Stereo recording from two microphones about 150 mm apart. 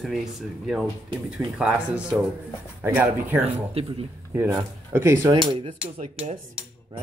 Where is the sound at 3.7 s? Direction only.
40° right (ahead or behind).